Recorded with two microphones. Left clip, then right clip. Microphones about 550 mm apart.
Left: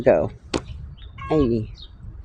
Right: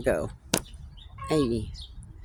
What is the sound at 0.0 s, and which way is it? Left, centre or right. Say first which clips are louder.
Speech: left 10 dB; right.